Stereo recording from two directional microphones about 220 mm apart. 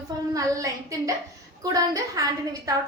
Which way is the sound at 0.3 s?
15° right (ahead or behind).